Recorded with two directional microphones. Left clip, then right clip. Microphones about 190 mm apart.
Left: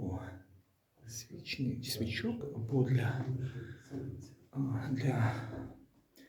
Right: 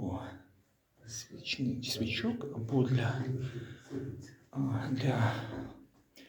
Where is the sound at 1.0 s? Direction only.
20° left (ahead or behind).